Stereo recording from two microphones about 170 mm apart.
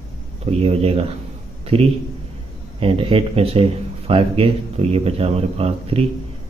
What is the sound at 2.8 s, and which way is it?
Speech, 35° right (ahead or behind).